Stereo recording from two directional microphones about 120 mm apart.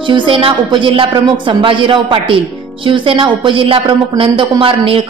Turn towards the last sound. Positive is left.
turn(degrees=-45)  # may be behind; listen again after turning